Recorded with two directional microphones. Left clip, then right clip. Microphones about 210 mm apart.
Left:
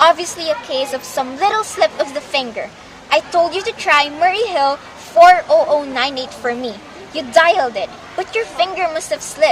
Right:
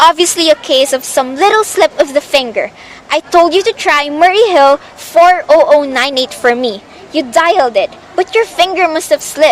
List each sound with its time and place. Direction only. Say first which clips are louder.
0.0 s a woman's voice: right 5 dB; 50° right (ahead or behind)